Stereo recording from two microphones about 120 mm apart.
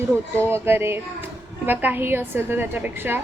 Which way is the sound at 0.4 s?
20° right (ahead or behind).